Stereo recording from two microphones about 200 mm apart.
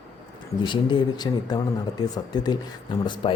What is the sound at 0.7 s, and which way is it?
Speech, 20° left (ahead or behind).